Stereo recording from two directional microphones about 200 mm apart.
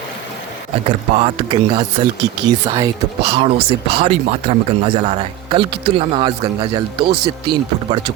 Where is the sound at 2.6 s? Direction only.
15° right (ahead or behind).